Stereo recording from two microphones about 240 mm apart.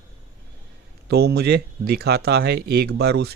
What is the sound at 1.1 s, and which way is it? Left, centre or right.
Speech, right.